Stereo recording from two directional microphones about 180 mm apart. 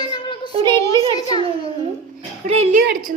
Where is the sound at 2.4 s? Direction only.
35° right (ahead or behind).